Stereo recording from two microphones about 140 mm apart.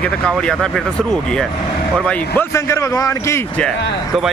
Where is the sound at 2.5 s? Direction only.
20° left (ahead or behind).